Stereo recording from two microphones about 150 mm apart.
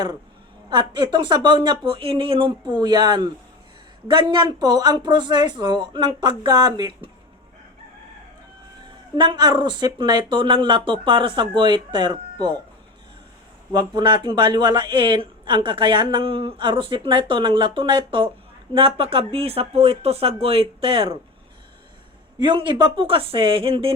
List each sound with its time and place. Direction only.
0.7 s speech: 30° right (ahead or behind)
9.1 s speech: 30° right (ahead or behind)
13.7 s speech: 30° right (ahead or behind)
22.4 s speech: 30° right (ahead or behind)